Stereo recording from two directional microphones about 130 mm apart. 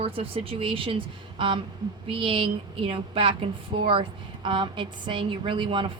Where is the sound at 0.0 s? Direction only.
45° right (ahead or behind).